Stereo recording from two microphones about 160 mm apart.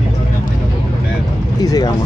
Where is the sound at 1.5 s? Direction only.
25° left (ahead or behind).